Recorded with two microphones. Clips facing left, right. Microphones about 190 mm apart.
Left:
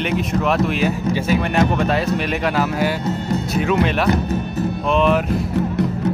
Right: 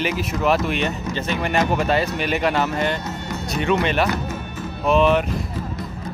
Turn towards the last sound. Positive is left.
turn(degrees=0)  # may be behind; listen again after turning